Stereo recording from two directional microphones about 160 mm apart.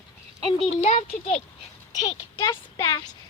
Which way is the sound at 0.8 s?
45° left (ahead or behind).